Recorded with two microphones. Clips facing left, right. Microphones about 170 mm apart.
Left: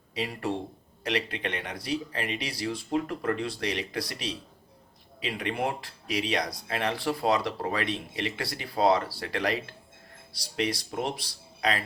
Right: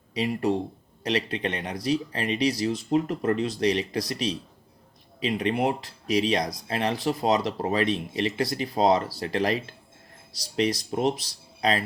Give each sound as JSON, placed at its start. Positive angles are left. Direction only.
{"t": 0.1, "sound": "speech", "side_deg": -20}